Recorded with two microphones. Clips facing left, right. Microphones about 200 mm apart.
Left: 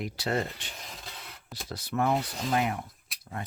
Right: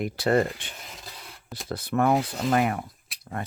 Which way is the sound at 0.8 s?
Centre (ahead or behind).